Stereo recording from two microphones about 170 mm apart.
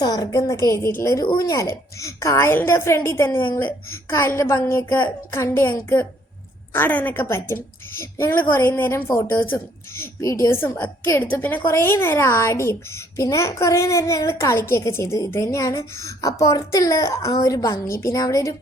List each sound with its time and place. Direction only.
0.0 s a woman's voice: 20° left (ahead or behind)
3.3 s a woman's voice: 30° left (ahead or behind)
3.6 s a woman's voice: 15° left (ahead or behind)